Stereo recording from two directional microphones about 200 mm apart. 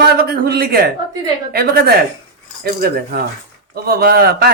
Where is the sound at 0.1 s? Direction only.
50° right (ahead or behind).